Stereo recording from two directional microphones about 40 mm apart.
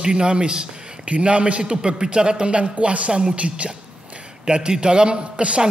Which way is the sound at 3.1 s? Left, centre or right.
Centre.